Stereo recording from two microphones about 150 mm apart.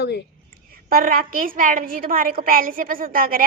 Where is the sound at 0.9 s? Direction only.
70° right (ahead or behind).